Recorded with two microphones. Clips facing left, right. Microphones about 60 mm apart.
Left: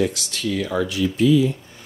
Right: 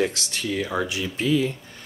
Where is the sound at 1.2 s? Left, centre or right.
Right.